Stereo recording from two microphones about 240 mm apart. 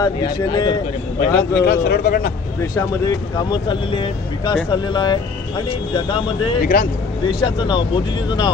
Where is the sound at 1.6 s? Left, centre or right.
Left.